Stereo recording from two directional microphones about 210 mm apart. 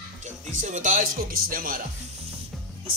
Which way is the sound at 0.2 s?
35° right (ahead or behind).